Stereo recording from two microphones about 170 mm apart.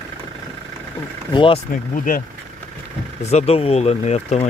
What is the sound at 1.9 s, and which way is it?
Speech, 50° left (ahead or behind).